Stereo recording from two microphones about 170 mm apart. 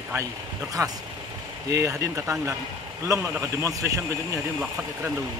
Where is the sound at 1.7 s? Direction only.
15° right (ahead or behind).